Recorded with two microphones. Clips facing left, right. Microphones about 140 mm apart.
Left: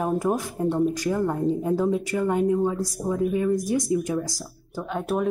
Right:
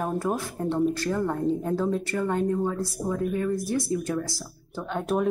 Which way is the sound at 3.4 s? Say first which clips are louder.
Left 3 dB; 15° left (ahead or behind).